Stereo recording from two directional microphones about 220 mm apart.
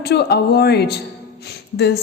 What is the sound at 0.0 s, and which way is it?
Speech, 45° left (ahead or behind).